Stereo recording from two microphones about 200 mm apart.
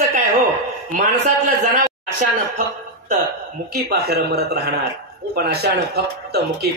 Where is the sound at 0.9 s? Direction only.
35° right (ahead or behind).